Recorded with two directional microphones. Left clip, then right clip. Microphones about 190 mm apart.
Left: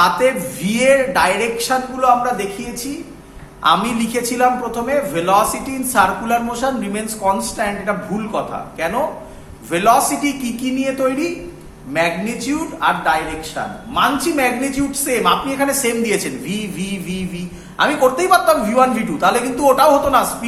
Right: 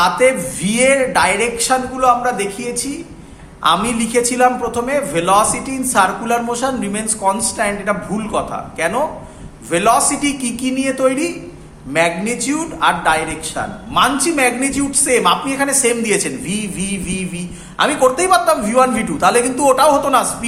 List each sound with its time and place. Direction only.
0.0 s a woman's voice: 20° right (ahead or behind)
3.6 s a woman's voice: 20° right (ahead or behind)